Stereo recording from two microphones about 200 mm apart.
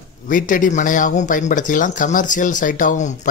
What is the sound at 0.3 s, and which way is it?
Speech, 40° left (ahead or behind).